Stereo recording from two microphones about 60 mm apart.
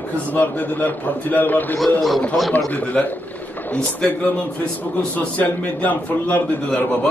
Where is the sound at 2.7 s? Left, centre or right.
Left.